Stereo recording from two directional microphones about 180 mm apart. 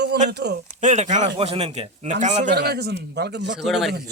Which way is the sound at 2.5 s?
65° right (ahead or behind).